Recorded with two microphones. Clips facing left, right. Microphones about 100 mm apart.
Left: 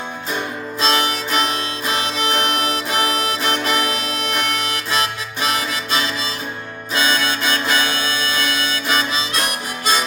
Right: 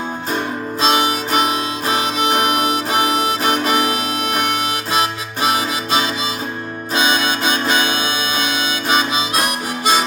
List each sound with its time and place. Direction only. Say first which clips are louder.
0.8 s music: right 3 dB; 15° right (ahead or behind)